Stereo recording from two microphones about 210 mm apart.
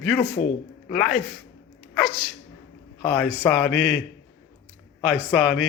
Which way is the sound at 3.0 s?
5° left (ahead or behind).